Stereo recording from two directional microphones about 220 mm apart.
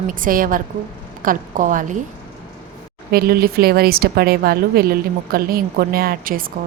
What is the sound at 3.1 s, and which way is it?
A woman's voice, 45° right (ahead or behind).